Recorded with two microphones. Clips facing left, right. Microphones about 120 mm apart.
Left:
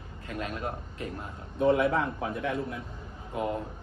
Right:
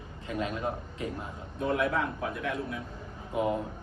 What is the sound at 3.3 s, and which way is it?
Speech, 20° right (ahead or behind).